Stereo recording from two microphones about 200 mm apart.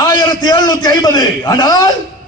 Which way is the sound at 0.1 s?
20° left (ahead or behind).